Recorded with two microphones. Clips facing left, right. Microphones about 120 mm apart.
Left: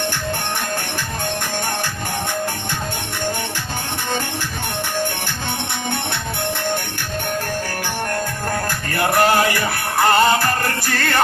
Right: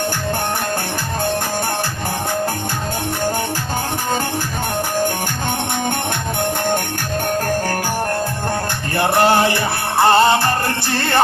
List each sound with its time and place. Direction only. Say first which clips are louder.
8.9 s music: right 2 dB; 25° right (ahead or behind)